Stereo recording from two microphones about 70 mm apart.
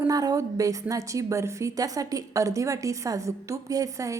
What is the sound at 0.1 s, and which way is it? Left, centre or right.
A woman's voice, right.